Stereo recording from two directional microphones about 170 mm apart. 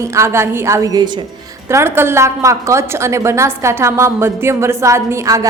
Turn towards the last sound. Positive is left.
turn(degrees=-20)  # may be behind; listen again after turning